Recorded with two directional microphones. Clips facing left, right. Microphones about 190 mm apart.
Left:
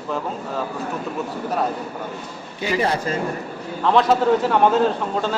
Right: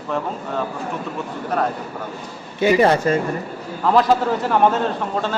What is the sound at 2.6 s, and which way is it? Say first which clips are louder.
Speech: right 7 dB; 60° right (ahead or behind).